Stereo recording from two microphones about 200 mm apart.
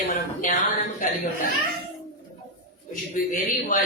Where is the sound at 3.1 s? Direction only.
40° left (ahead or behind).